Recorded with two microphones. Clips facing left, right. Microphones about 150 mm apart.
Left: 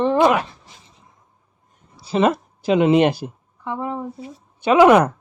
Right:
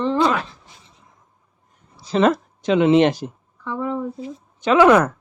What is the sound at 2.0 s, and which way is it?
A woman's voice, 10° left (ahead or behind).